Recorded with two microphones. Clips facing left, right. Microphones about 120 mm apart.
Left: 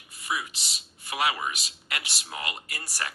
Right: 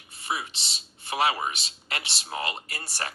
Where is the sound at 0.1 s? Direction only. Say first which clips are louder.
Even; 30° right (ahead or behind).